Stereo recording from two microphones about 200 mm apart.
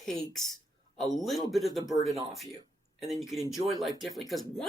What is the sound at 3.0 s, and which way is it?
Speech, 30° right (ahead or behind).